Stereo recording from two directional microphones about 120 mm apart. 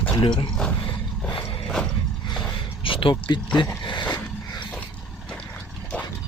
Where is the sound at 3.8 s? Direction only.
40° left (ahead or behind).